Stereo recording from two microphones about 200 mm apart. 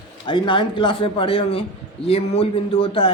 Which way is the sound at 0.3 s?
25° left (ahead or behind).